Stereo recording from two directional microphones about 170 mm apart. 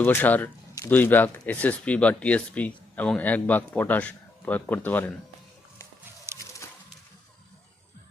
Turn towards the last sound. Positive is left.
turn(degrees=-15)  # may be behind; listen again after turning